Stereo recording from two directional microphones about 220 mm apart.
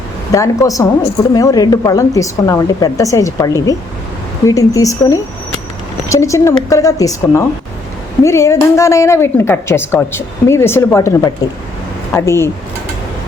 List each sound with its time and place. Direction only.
0.3 s a woman's voice: 15° left (ahead or behind)